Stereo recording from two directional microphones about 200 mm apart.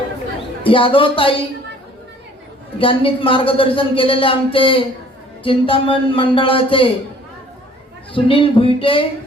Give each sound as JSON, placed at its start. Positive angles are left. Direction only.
{"t": 0.6, "sound": "speech", "side_deg": 25}
{"t": 2.7, "sound": "speech", "side_deg": 25}
{"t": 8.1, "sound": "speech", "side_deg": 25}